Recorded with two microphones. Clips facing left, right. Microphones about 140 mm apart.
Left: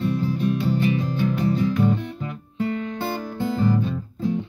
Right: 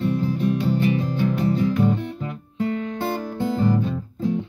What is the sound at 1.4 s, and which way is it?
Music, 30° right (ahead or behind).